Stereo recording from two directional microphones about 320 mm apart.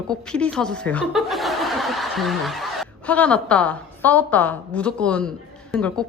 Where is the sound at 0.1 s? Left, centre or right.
Centre.